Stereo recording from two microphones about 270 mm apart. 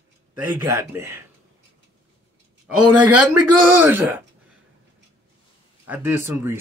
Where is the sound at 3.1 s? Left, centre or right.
Right.